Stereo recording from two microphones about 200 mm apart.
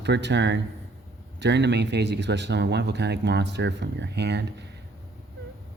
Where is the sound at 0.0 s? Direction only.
60° right (ahead or behind).